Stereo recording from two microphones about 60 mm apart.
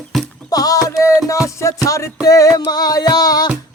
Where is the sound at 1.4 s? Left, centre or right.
Left.